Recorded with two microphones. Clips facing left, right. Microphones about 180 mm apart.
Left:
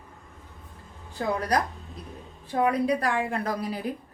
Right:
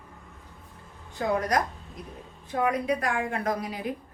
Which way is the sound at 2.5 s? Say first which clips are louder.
Left 2 dB; 35° left (ahead or behind).